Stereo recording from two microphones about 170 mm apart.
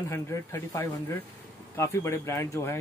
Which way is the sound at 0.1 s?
15° left (ahead or behind).